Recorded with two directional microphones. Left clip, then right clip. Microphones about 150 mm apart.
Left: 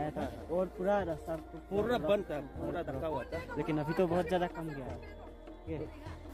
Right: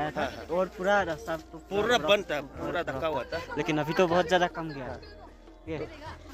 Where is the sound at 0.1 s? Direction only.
20° left (ahead or behind).